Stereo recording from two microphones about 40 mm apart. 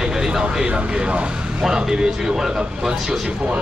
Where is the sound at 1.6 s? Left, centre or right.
Centre.